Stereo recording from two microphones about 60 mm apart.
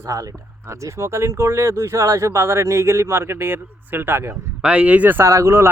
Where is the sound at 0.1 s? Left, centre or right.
Right.